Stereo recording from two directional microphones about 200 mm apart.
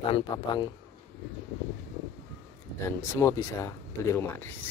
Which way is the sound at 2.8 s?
15° left (ahead or behind).